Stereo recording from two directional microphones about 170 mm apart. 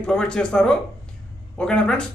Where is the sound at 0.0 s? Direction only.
5° left (ahead or behind).